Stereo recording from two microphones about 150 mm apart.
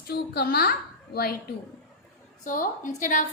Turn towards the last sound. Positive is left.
turn(degrees=60)  # may be behind; listen again after turning